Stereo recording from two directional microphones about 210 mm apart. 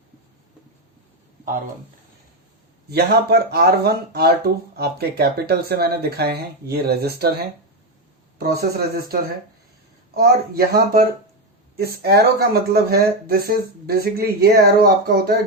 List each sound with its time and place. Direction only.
2.9 s speech: 50° right (ahead or behind)
10.2 s speech: 45° right (ahead or behind)